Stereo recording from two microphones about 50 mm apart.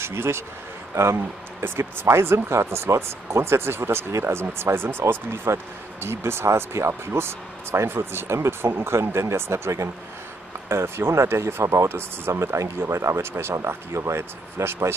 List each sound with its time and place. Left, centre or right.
0.0 s speech: right
7.1 s speech: right
10.7 s speech: right